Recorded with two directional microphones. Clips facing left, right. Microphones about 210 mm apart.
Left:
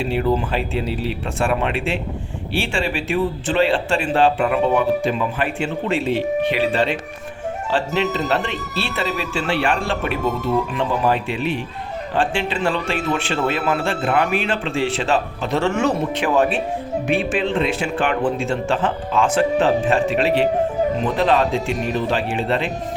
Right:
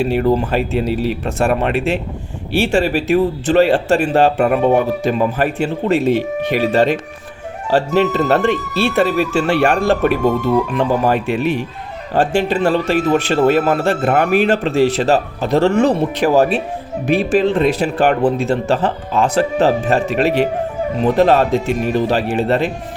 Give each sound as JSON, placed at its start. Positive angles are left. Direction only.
{"t": 0.0, "sound": "a man's voice", "side_deg": -45}